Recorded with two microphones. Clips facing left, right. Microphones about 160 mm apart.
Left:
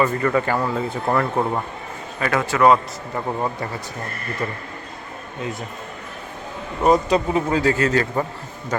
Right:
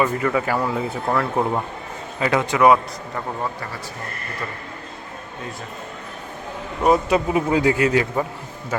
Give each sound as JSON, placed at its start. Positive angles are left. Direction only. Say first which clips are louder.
{"t": 0.0, "sound": "speech", "louder": "left 1 dB", "side_deg": -5}
{"t": 2.1, "sound": "speech", "louder": "right 1 dB", "side_deg": -15}
{"t": 3.2, "sound": "speech", "louder": "left 4 dB", "side_deg": 15}
{"t": 6.8, "sound": "speech", "louder": "left 1 dB", "side_deg": -5}